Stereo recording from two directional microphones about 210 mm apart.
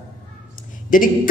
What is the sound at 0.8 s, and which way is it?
Speech, 40° left (ahead or behind).